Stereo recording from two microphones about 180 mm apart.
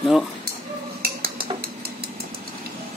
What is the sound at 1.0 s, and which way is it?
Cutlery, 55° right (ahead or behind).